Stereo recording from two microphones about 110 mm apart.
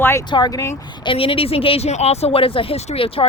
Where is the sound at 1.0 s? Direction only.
55° left (ahead or behind).